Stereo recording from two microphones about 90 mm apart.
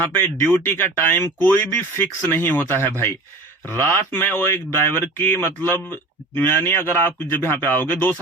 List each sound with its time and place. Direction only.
0.0 s speech: 20° left (ahead or behind)